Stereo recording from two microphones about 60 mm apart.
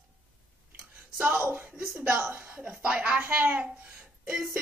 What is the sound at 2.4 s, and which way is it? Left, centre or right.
Speech, centre.